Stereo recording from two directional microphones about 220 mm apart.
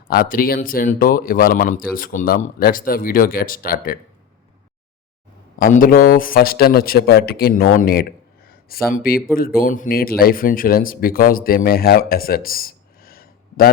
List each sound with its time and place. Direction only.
0.1 s speech: 40° left (ahead or behind)
5.5 s speech: 40° left (ahead or behind)